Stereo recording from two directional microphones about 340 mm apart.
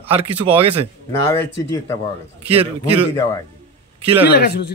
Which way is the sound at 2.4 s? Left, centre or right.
Centre.